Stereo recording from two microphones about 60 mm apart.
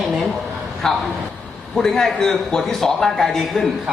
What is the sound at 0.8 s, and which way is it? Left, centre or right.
A man's voice, centre.